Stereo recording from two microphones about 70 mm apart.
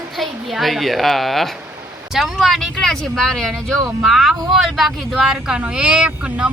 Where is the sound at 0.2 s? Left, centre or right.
Centre.